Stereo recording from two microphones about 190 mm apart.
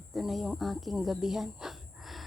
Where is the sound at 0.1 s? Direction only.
Centre (ahead or behind).